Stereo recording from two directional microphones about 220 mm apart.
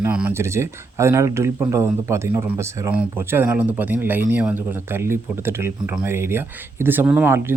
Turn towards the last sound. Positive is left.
turn(degrees=-10)  # may be behind; listen again after turning